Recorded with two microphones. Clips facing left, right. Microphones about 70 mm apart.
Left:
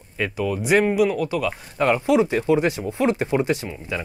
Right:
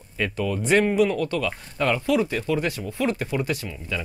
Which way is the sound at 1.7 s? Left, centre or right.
Left.